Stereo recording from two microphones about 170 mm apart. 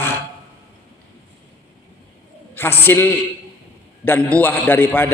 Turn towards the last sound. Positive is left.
turn(degrees=10)  # may be behind; listen again after turning